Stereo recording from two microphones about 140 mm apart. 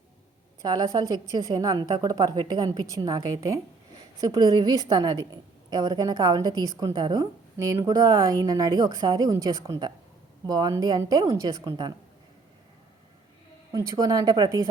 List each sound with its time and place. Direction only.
0.6 s a woman's voice: 30° right (ahead or behind)
13.7 s a woman's voice: 25° right (ahead or behind)